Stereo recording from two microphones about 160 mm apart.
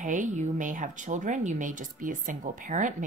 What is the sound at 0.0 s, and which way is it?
A woman's voice, 50° right (ahead or behind).